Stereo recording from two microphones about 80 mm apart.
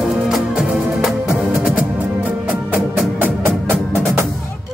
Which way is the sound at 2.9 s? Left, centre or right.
Right.